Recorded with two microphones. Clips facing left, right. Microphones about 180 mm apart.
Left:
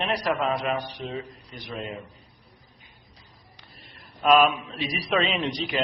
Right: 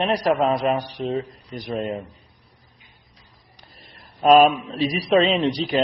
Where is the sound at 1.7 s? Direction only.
45° right (ahead or behind).